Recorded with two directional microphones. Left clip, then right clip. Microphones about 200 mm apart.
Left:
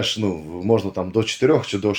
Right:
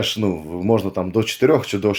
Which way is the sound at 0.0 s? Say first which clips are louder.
Right 1 dB; 35° right (ahead or behind).